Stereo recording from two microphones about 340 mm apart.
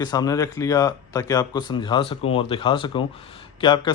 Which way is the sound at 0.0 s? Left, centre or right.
Centre.